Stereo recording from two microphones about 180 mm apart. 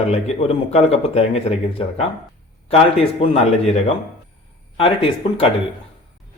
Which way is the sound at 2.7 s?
35° left (ahead or behind).